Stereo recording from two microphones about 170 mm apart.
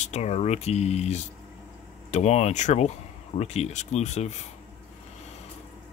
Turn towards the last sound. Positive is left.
turn(degrees=40)  # may be behind; listen again after turning